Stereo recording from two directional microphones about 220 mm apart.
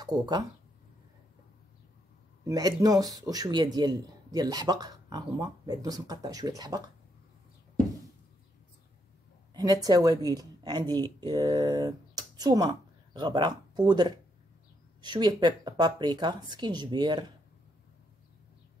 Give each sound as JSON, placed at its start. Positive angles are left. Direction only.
{"t": 0.0, "sound": "speech", "side_deg": -20}
{"t": 2.4, "sound": "speech", "side_deg": -15}
{"t": 9.5, "sound": "speech", "side_deg": -15}